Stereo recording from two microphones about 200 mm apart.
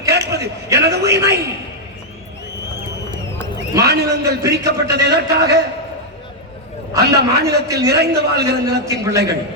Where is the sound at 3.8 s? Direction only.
55° right (ahead or behind).